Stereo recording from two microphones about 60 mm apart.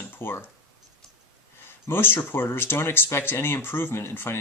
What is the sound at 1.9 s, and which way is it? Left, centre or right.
Speech, left.